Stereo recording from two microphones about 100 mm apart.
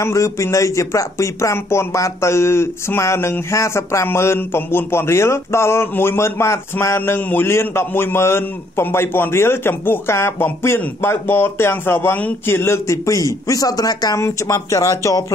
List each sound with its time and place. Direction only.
0.0 s speech: 30° left (ahead or behind)